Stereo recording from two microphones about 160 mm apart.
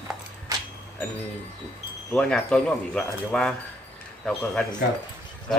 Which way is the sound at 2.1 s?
5° left (ahead or behind).